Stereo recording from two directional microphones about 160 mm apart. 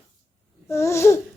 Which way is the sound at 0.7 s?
15° left (ahead or behind).